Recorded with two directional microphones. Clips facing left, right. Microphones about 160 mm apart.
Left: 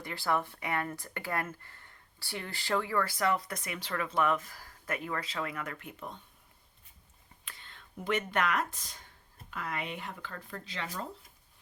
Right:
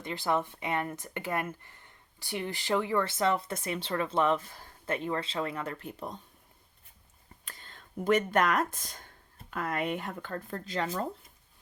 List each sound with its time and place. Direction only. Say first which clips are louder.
0.0 s speech: right 2 dB; 20° right (ahead or behind)
7.4 s speech: right 1 dB; 40° right (ahead or behind)